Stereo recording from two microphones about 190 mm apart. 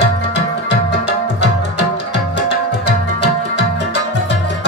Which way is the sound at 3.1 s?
65° left (ahead or behind).